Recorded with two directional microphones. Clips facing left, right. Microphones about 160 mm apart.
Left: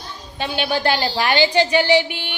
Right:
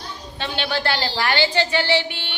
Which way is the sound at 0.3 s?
10° left (ahead or behind).